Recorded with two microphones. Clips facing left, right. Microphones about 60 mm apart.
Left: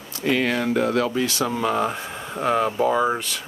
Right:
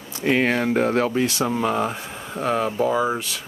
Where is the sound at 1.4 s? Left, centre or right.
Centre.